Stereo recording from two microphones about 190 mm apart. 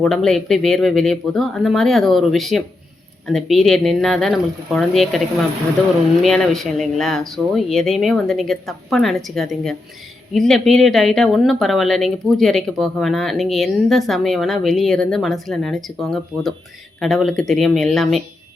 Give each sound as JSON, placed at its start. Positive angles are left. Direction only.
{"t": 0.0, "sound": "speech", "side_deg": 0}
{"t": 6.2, "sound": "speech", "side_deg": 0}